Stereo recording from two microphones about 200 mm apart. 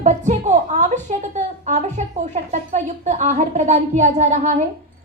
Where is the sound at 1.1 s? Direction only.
35° right (ahead or behind).